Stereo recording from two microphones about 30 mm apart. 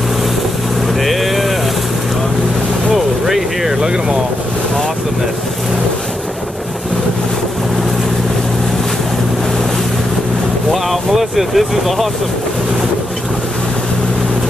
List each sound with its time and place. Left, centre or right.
1.0 s vehicle: centre
2.9 s a sound: centre
3.8 s vehicle: right
10.7 s vehicle: centre